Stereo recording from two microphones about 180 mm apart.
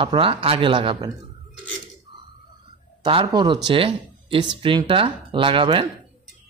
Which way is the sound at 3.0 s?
30° right (ahead or behind).